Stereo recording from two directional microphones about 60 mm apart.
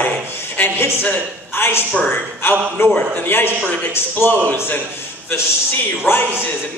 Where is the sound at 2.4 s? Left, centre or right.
Left.